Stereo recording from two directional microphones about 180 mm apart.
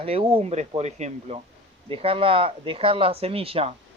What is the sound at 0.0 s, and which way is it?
Speech, 30° right (ahead or behind).